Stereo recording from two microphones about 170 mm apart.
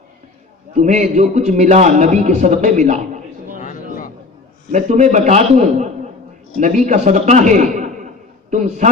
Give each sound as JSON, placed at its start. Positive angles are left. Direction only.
{"t": 0.7, "sound": "a man's voice", "side_deg": -45}
{"t": 4.7, "sound": "a man's voice", "side_deg": -45}